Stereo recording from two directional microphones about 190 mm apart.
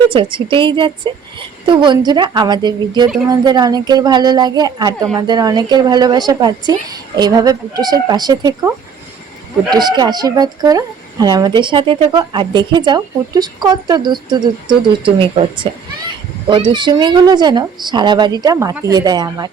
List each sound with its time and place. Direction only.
0.1 s speech: 25° right (ahead or behind)